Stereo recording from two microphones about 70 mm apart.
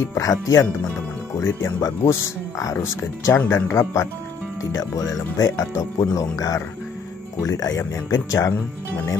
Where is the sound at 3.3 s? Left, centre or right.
Left.